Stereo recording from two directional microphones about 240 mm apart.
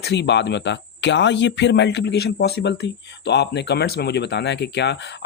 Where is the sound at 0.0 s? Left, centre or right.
Left.